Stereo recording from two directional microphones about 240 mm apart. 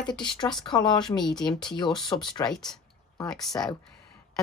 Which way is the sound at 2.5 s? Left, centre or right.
Centre.